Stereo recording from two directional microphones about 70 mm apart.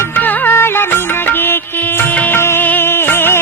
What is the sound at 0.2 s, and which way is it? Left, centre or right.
Music, left.